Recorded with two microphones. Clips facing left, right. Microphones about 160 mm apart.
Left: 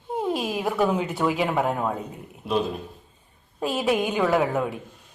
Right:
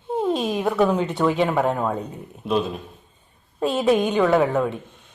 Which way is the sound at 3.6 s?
5° left (ahead or behind).